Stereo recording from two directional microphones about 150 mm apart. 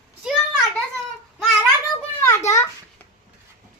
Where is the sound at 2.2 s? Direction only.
20° left (ahead or behind).